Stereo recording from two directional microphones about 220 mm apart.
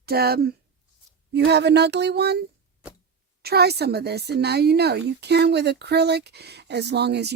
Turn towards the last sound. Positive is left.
turn(degrees=-50)  # may be behind; listen again after turning